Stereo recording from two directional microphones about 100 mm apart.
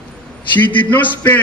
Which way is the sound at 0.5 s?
20° left (ahead or behind).